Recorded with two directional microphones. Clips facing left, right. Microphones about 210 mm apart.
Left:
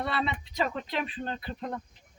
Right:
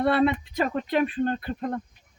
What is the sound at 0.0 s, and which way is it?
Speech, 55° right (ahead or behind).